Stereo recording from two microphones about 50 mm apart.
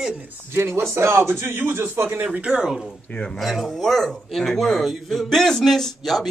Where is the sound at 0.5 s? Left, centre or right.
Right.